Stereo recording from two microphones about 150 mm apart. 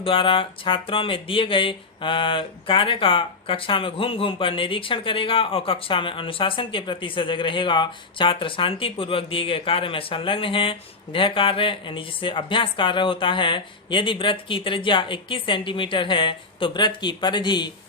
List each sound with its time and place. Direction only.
0.0 s speech: 35° left (ahead or behind)